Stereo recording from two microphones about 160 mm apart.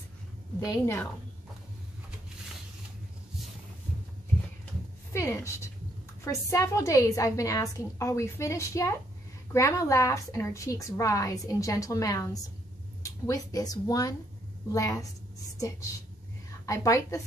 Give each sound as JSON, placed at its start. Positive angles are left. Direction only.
{"t": 0.7, "sound": "a woman's voice", "side_deg": 15}
{"t": 5.1, "sound": "a woman's voice", "side_deg": 20}
{"t": 16.6, "sound": "a woman's voice", "side_deg": 20}